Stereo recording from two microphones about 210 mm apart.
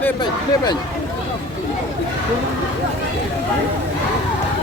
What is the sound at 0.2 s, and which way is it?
Speech, 20° left (ahead or behind).